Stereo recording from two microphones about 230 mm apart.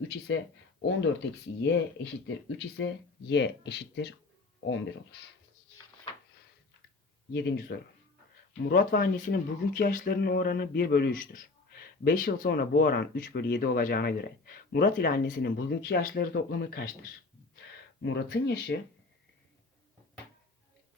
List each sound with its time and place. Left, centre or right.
0.3 s speech: left
7.3 s speech: left